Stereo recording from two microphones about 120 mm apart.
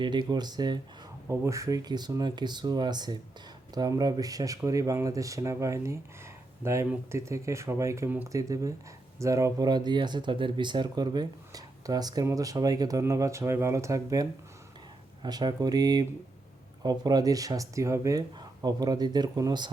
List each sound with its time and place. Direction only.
0.0 s speech: 40° right (ahead or behind)